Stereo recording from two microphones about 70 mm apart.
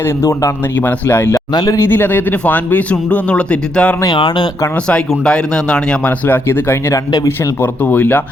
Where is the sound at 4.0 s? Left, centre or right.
Left.